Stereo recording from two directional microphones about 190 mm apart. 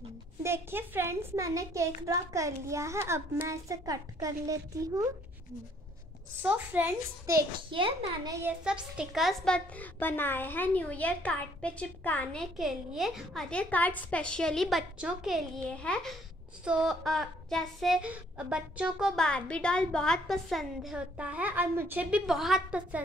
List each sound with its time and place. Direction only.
0.4 s a child's voice: 10° right (ahead or behind)
6.4 s a child's voice: 10° right (ahead or behind)
8.6 s a child's voice: 5° right (ahead or behind)